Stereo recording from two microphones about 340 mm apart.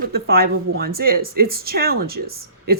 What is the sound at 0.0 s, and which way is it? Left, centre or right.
A woman's voice, right.